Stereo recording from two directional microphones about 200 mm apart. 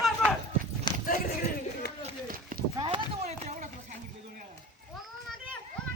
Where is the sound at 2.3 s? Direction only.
45° right (ahead or behind).